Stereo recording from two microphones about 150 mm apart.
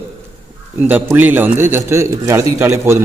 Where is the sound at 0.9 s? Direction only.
10° right (ahead or behind).